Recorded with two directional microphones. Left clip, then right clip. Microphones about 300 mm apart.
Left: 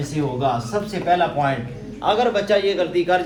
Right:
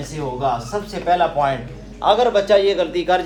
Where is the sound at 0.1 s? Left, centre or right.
Centre.